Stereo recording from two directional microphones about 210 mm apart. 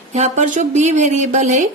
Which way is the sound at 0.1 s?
35° right (ahead or behind).